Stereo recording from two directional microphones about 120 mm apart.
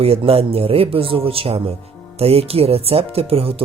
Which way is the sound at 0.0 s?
55° right (ahead or behind).